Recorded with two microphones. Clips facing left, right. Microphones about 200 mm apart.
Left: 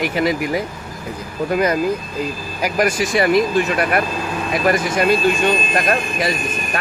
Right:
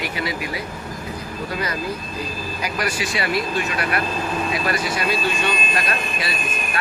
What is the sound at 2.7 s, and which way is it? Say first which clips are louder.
Speech: left 9 dB; 45° left (ahead or behind).